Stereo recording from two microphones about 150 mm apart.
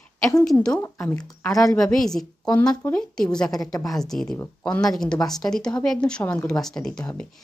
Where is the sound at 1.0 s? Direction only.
25° left (ahead or behind).